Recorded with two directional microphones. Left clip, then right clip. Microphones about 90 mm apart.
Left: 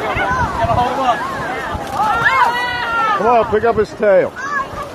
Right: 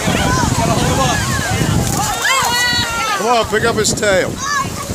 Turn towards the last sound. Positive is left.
turn(degrees=-60)  # may be behind; listen again after turning